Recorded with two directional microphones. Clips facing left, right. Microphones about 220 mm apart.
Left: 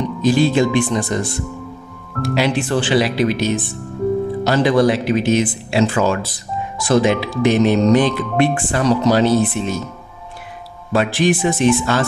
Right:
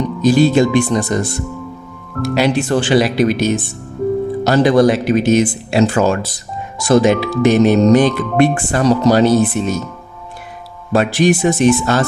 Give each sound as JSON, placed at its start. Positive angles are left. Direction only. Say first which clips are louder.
{"t": 0.2, "sound": "speech", "louder": "right 3 dB", "side_deg": -40}
{"t": 10.9, "sound": "speech", "louder": "right 3 dB", "side_deg": -45}